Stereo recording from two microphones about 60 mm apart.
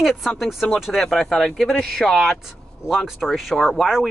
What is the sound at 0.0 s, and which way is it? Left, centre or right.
Speech, centre.